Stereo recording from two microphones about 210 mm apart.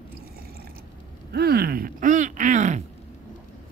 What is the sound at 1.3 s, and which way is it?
Speech, 50° right (ahead or behind).